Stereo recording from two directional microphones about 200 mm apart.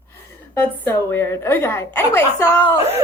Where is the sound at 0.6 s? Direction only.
10° left (ahead or behind).